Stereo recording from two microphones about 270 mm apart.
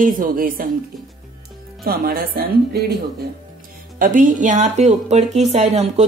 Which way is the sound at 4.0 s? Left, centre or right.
Right.